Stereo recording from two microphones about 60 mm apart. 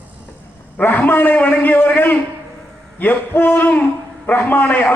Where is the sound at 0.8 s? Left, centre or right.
Left.